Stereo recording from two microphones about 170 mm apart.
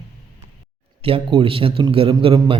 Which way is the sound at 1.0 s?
30° right (ahead or behind).